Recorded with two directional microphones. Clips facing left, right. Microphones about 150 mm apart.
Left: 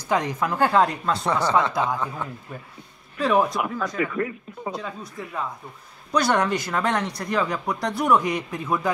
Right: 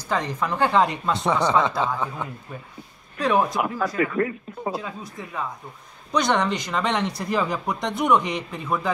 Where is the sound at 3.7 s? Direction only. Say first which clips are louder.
Right 2 dB; 45° right (ahead or behind).